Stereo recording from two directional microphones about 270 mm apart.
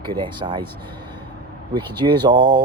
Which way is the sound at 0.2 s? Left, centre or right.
Centre.